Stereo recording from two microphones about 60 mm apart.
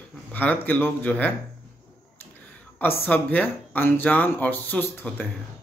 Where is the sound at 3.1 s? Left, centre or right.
Left.